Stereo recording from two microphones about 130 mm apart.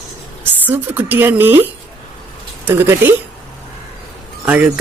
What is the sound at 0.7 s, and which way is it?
Speech, 15° right (ahead or behind).